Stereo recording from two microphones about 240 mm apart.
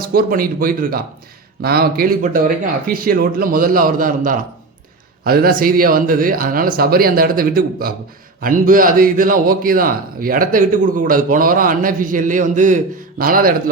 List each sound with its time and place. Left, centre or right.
0.1 s a man's voice: right